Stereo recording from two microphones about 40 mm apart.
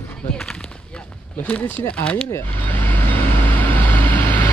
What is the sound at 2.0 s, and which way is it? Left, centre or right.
Speech, left.